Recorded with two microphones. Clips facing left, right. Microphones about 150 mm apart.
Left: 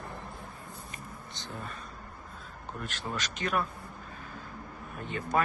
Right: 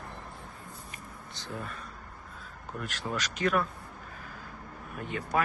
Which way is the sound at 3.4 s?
70° right (ahead or behind).